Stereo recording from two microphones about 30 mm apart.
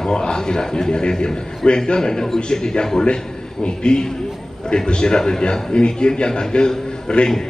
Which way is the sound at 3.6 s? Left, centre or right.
Left.